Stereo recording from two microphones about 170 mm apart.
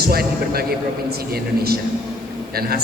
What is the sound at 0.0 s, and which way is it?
Speech, 65° right (ahead or behind).